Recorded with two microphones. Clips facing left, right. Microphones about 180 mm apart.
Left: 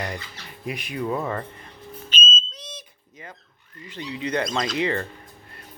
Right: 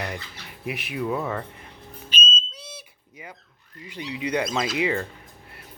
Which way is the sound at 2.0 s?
10° right (ahead or behind).